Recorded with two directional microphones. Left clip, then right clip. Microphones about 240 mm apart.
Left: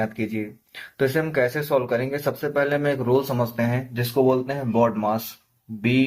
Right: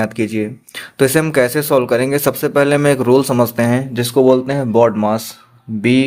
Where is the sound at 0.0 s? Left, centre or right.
Right.